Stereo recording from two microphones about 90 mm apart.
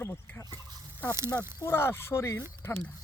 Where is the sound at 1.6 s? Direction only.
25° left (ahead or behind).